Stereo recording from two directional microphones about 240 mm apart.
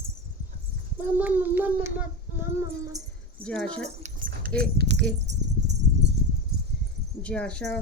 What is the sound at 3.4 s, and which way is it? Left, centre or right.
Speech, centre.